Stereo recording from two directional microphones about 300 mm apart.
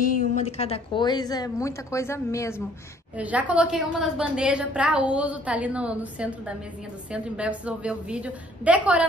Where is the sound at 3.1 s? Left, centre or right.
Centre.